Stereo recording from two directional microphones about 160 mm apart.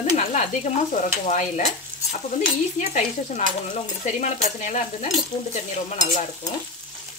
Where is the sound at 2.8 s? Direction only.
45° left (ahead or behind).